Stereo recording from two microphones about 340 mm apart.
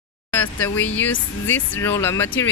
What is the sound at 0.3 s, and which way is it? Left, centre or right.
Speech, centre.